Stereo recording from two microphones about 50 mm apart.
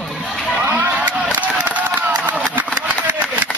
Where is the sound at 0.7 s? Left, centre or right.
Right.